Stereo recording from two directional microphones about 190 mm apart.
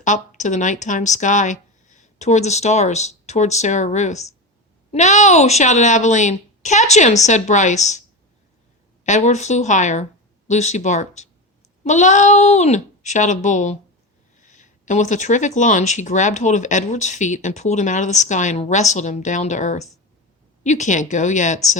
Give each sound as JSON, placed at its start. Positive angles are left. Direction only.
{"t": 0.0, "sound": "speech", "side_deg": 40}
{"t": 9.0, "sound": "speech", "side_deg": 40}